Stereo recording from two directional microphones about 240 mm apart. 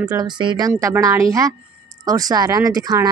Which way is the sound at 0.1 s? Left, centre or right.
Centre.